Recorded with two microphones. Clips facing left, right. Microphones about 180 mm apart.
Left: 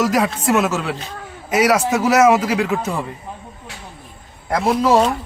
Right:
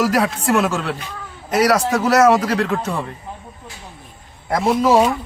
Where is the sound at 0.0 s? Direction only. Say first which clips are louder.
Even; centre (ahead or behind).